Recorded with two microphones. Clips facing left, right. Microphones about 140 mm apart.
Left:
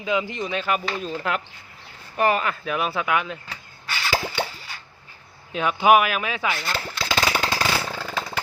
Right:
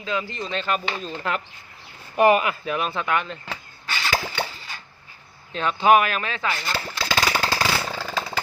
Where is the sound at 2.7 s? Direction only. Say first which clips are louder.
Left 3 dB; 5° left (ahead or behind).